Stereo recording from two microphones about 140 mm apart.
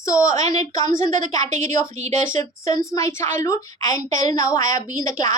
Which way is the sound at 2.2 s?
20° left (ahead or behind).